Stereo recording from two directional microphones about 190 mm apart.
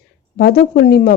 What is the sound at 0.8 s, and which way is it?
Speech, 55° left (ahead or behind).